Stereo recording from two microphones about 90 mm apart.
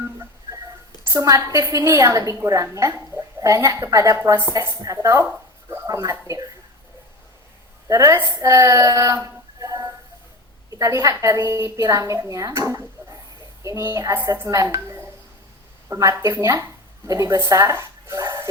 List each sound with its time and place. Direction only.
0.0 s a sound: 35° right (ahead or behind)
1.0 s a woman's voice: 35° right (ahead or behind)
7.9 s a woman's voice: 35° right (ahead or behind)